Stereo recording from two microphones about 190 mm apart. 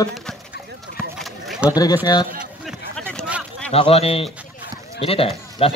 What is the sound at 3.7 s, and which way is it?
Speech, 30° left (ahead or behind).